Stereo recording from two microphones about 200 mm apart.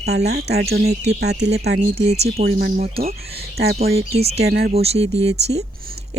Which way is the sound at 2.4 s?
50° right (ahead or behind).